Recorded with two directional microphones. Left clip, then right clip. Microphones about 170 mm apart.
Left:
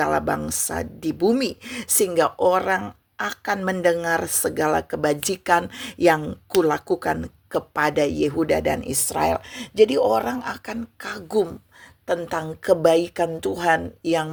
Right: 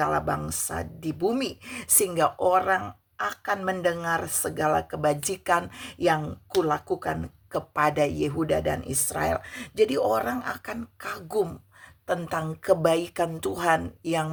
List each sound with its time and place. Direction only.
0.0 s a woman's voice: 35° left (ahead or behind); by 14.3 s 15° left (ahead or behind)